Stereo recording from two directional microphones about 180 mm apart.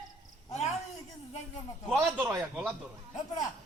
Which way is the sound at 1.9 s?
10° right (ahead or behind).